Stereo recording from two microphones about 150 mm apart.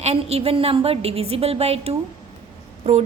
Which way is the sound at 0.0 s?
45° right (ahead or behind).